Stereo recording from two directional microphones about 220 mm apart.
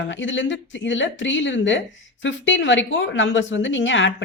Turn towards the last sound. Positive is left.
turn(degrees=55)  # may be behind; listen again after turning